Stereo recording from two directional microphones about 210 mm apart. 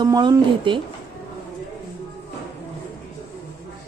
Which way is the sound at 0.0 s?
20° right (ahead or behind).